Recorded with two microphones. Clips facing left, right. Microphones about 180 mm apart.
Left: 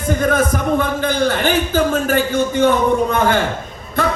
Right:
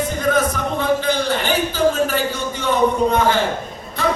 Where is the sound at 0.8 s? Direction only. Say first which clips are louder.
Left 1 dB; 50° left (ahead or behind).